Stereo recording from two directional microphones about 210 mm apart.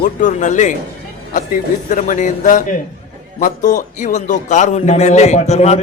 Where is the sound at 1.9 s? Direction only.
35° left (ahead or behind).